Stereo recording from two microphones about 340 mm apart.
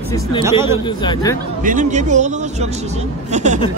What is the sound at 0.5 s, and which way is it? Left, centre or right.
Speech, centre.